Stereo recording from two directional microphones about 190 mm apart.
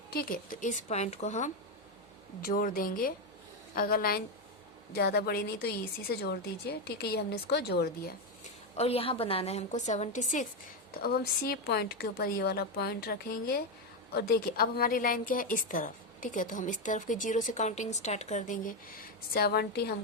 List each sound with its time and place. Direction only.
0.1 s a woman's voice: 50° left (ahead or behind)
8.8 s a woman's voice: 30° left (ahead or behind)
11.0 s a woman's voice: 55° left (ahead or behind)